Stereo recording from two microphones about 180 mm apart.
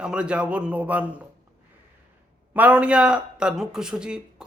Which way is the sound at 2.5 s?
10° right (ahead or behind).